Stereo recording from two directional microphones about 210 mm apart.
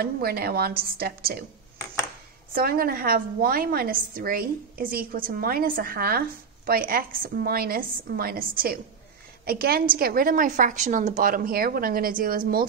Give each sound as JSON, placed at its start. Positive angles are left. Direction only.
{"t": 0.0, "sound": "a woman's voice", "side_deg": -50}
{"t": 2.5, "sound": "a woman's voice", "side_deg": -45}